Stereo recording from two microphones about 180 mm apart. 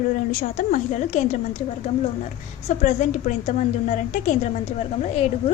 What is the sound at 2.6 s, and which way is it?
A woman's voice, 45° left (ahead or behind).